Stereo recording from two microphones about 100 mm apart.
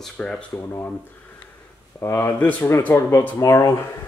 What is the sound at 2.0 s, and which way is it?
Speech, 25° left (ahead or behind).